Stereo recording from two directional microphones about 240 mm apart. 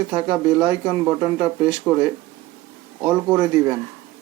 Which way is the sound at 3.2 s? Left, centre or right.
Centre.